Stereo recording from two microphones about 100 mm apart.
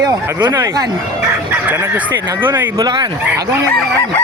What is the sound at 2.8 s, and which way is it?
Speech, 45° right (ahead or behind).